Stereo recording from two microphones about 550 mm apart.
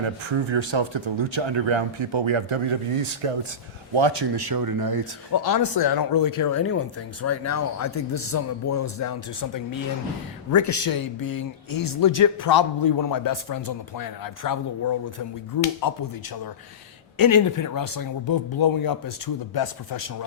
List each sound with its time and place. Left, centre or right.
0.0 s speech: right
3.9 s speech: right
5.3 s speech: left
10.5 s speech: left
17.2 s speech: left